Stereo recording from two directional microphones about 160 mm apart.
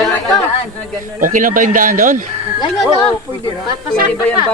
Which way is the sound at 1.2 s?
55° right (ahead or behind).